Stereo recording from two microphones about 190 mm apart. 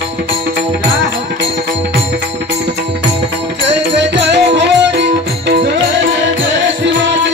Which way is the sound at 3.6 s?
65° right (ahead or behind).